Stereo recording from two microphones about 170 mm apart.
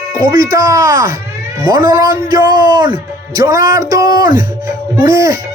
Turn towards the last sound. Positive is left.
turn(degrees=-20)  # may be behind; listen again after turning